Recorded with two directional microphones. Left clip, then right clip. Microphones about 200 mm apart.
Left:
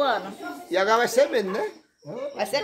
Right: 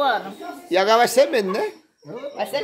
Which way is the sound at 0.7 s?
40° right (ahead or behind).